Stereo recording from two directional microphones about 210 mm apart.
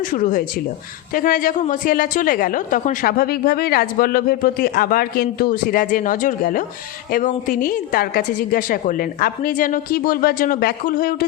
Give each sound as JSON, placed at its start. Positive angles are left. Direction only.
{"t": 0.1, "sound": "a woman's voice", "side_deg": 40}